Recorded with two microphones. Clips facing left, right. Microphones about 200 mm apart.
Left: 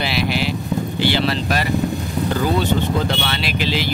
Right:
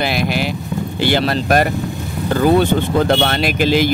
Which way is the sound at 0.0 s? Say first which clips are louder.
Right 2 dB; 50° right (ahead or behind).